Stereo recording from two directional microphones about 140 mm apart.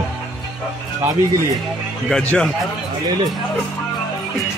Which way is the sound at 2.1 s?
5° left (ahead or behind).